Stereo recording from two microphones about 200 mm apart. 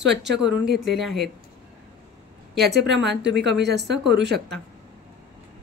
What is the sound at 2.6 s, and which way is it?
A woman's voice, 55° right (ahead or behind).